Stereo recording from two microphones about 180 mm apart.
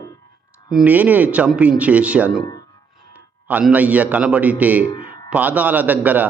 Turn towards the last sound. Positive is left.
turn(degrees=-10)  # may be behind; listen again after turning